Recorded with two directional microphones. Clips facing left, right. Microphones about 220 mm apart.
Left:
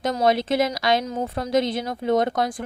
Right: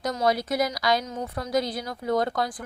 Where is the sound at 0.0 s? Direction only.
25° left (ahead or behind).